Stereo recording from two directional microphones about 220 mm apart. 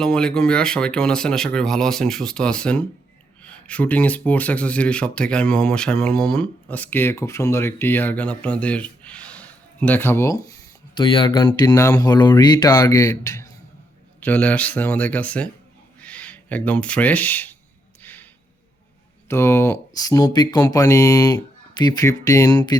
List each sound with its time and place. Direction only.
0.0 s speech: 5° left (ahead or behind)
18.0 s a sound: 5° left (ahead or behind)
19.3 s speech: 10° left (ahead or behind)